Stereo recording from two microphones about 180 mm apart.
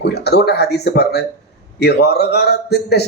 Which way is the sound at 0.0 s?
65° left (ahead or behind).